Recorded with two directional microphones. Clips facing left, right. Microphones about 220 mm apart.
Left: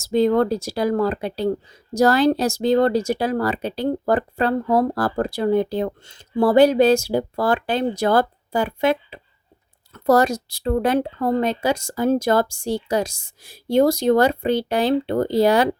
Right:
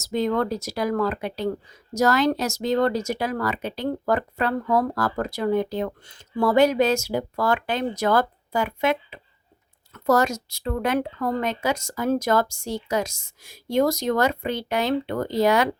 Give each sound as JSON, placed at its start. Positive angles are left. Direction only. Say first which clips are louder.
{"t": 0.0, "sound": "speech", "louder": "left 6 dB", "side_deg": 30}